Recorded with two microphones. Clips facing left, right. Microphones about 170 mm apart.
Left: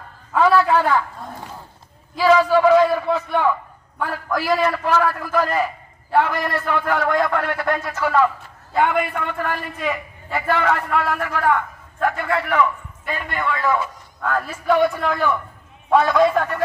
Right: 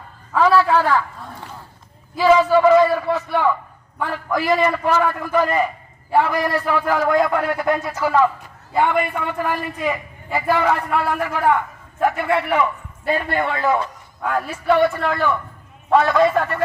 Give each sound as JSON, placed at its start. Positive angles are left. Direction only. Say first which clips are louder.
{"t": 0.3, "sound": "a man's voice", "louder": "even", "side_deg": 0}
{"t": 2.1, "sound": "a man's voice", "louder": "right 1 dB", "side_deg": -5}
{"t": 4.3, "sound": "a man's voice", "louder": "right 2 dB", "side_deg": -10}
{"t": 5.0, "sound": "a man's voice", "louder": "right 1 dB", "side_deg": 5}
{"t": 12.1, "sound": "a man's voice", "louder": "right 1 dB", "side_deg": -20}
{"t": 13.1, "sound": "a man's voice", "louder": "right 4 dB", "side_deg": -35}
{"t": 13.7, "sound": "a sound", "louder": "right 1 dB", "side_deg": 5}
{"t": 14.3, "sound": "a man's voice", "louder": "right 1 dB", "side_deg": -10}